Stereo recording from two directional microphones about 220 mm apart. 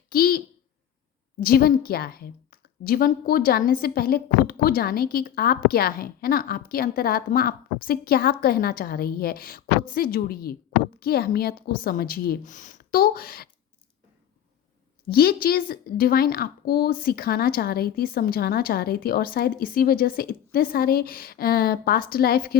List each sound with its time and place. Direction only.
0.1 s a child's voice: 40° left (ahead or behind)
15.0 s a woman's voice: 45° left (ahead or behind)